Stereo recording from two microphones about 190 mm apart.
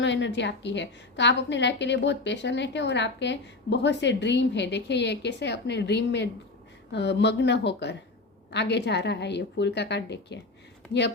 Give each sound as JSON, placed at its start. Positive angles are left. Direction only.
{"t": 0.0, "sound": "a woman's voice", "side_deg": 70}